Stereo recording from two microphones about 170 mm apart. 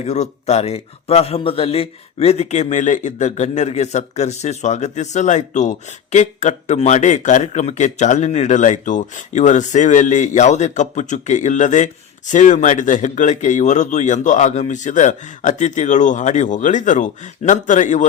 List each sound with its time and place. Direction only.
0.0 s speech: 40° left (ahead or behind)